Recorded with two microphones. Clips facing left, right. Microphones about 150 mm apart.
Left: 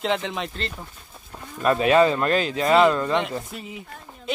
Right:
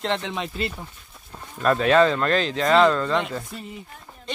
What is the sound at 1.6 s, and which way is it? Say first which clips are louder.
Speech: even; 10° left (ahead or behind).